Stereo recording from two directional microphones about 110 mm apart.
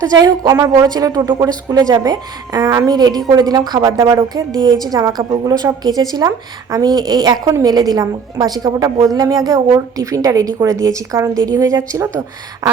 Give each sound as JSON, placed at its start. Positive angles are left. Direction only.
{"t": 0.0, "sound": "a woman's voice", "side_deg": -40}